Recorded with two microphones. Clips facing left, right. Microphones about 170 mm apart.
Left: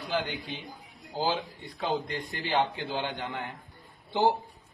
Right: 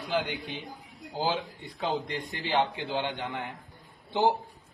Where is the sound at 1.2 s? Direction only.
20° right (ahead or behind).